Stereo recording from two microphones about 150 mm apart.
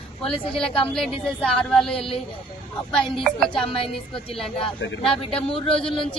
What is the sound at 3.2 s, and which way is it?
Speech, 5° left (ahead or behind).